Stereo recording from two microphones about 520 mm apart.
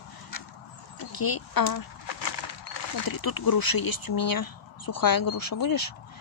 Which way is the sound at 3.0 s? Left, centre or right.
Left.